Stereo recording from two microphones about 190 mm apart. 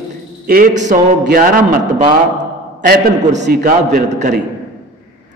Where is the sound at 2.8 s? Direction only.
45° right (ahead or behind).